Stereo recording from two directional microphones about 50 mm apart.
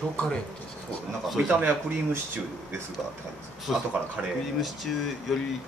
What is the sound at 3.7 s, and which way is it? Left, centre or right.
Speech, centre.